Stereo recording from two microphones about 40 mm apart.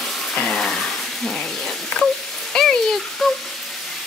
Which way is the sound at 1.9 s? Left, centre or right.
Left.